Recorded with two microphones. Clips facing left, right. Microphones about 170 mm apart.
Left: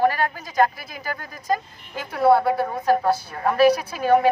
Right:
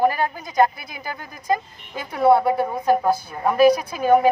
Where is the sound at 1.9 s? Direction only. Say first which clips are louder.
Right 1 dB; 15° right (ahead or behind).